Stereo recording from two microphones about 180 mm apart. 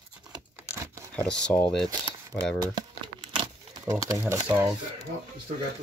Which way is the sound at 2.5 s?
25° right (ahead or behind).